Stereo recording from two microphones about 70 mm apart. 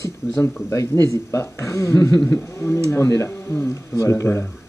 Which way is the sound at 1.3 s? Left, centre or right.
Left.